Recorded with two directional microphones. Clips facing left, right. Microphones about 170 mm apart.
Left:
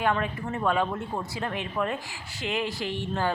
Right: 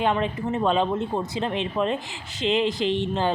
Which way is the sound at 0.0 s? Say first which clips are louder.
Right 3 dB; 20° right (ahead or behind).